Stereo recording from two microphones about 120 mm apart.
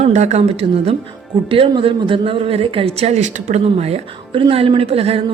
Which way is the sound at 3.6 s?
60° right (ahead or behind).